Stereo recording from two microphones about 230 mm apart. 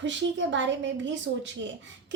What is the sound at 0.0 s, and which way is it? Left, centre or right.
Speech, right.